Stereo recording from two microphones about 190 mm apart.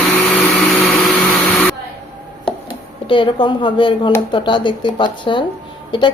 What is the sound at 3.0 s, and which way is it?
A woman's voice, 25° left (ahead or behind).